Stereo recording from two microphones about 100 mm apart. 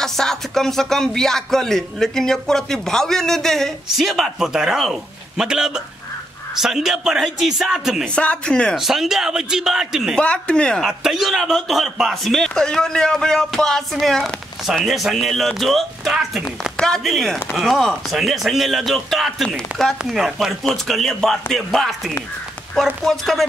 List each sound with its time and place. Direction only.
0.0 s a man's voice: 5° left (ahead or behind)
8.0 s speech: 10° left (ahead or behind)
8.7 s a man's voice: 5° right (ahead or behind)
10.1 s speech: 10° left (ahead or behind)
10.8 s a man's voice: centre (ahead or behind)